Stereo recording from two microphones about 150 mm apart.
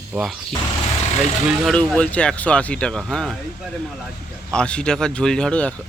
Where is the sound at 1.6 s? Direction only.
5° left (ahead or behind).